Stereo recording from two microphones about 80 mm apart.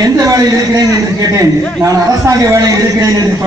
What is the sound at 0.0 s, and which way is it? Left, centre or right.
A man's voice, right.